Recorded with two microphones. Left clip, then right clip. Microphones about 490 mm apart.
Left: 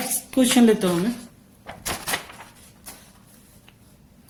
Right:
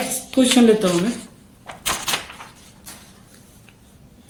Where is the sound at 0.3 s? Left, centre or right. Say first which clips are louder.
Right 3 dB; left.